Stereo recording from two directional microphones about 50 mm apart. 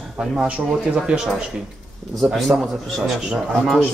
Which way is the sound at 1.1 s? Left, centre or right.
Right.